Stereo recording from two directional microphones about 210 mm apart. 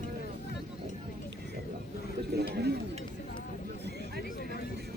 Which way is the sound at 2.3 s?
50° right (ahead or behind).